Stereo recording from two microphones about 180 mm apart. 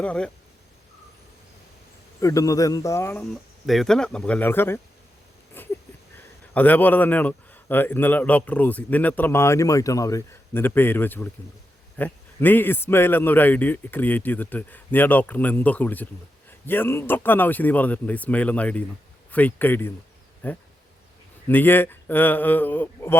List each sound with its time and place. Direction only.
0.0 s a man's voice: 5° left (ahead or behind)
2.2 s a man's voice: 20° left (ahead or behind)
3.7 s speech: centre (ahead or behind)
5.6 s a sound: 10° left (ahead or behind)
6.5 s a man's voice: 10° left (ahead or behind)